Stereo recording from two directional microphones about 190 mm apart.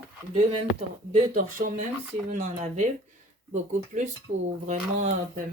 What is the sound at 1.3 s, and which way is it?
Speech, 45° right (ahead or behind).